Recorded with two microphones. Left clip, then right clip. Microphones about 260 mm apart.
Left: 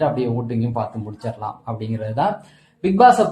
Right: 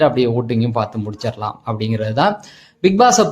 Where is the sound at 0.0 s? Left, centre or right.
Right.